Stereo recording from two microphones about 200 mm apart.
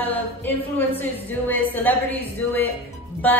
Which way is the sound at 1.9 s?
10° left (ahead or behind).